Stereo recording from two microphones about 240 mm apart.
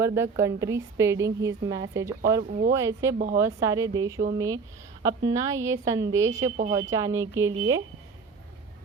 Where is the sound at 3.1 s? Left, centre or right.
Right.